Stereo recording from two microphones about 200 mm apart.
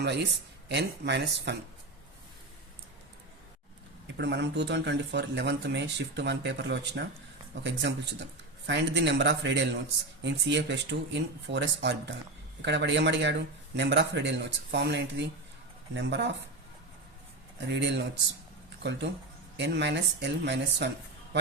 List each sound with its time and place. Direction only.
0.0 s speech: 55° right (ahead or behind)
4.2 s speech: 60° right (ahead or behind)
17.7 s speech: 60° right (ahead or behind)